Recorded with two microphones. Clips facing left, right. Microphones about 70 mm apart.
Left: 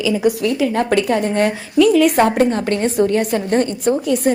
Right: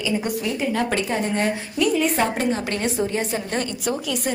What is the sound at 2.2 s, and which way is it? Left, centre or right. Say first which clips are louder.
A woman's voice: left 8 dB; left.